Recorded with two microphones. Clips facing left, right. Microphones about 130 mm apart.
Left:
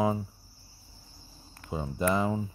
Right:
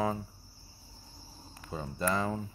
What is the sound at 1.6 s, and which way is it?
Speech, 10° left (ahead or behind).